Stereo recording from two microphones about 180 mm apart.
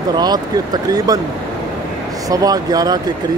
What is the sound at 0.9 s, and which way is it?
Speech, 20° right (ahead or behind).